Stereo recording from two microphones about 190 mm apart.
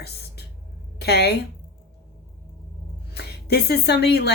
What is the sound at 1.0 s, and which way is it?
Speech, 60° left (ahead or behind).